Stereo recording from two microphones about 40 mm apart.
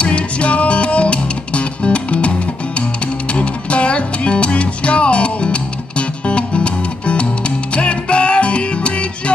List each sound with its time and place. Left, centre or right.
0.0 s music: left
3.3 s music: left